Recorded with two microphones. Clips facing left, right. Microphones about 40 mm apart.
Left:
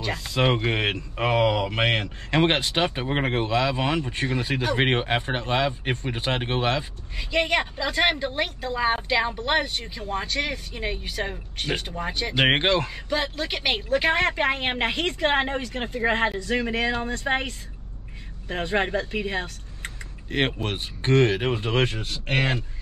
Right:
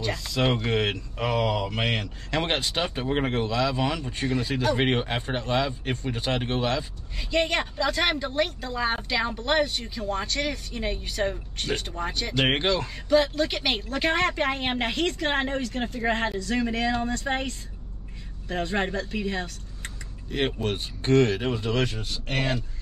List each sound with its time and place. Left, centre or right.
0.1 s speech: centre
7.2 s speech: centre
12.4 s speech: left
12.9 s speech: centre
20.2 s speech: left
20.5 s speech: left